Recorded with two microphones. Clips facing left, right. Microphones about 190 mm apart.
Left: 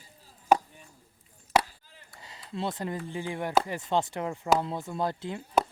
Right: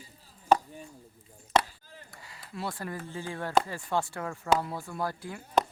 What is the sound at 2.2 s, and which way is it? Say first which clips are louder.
Speech: left 4 dB; 25° left (ahead or behind).